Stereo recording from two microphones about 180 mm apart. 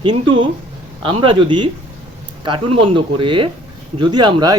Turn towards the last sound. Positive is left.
turn(degrees=-25)  # may be behind; listen again after turning